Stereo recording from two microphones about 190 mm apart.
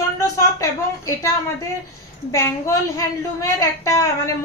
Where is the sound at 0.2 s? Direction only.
15° left (ahead or behind).